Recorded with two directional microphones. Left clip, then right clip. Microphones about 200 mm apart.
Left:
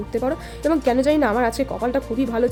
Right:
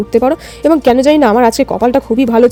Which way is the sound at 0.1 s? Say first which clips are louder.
Right 12 dB; 40° right (ahead or behind).